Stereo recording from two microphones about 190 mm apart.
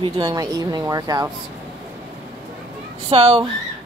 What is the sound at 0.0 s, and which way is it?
Speech, 20° right (ahead or behind).